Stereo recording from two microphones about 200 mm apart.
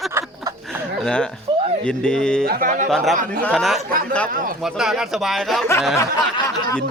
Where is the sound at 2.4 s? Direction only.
45° right (ahead or behind).